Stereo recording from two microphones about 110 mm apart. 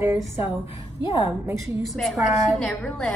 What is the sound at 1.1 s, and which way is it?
Speech, 30° right (ahead or behind).